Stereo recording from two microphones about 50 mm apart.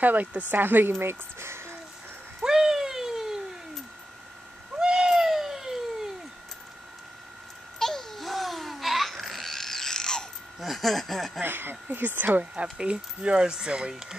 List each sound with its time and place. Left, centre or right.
0.0 s speech: right
2.4 s a sound: centre
4.7 s cat: centre
7.8 s laughter: centre
10.6 s speech: centre
11.4 s speech: right
12.7 s speech: right